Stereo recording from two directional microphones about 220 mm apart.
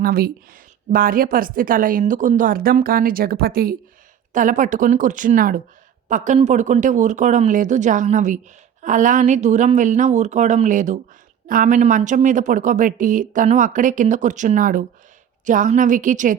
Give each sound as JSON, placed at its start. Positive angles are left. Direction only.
{"t": 0.0, "sound": "speech", "side_deg": -40}